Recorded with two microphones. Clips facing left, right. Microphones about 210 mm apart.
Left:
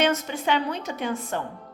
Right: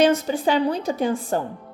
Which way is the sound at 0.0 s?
35° right (ahead or behind).